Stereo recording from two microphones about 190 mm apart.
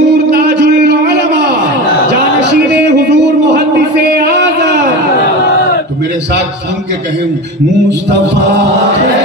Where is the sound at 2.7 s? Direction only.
65° right (ahead or behind).